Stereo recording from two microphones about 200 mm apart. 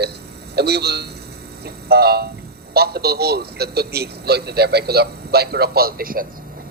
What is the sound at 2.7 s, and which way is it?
Speech, 50° right (ahead or behind).